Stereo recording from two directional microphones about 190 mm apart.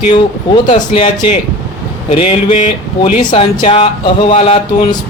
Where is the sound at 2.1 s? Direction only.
30° left (ahead or behind).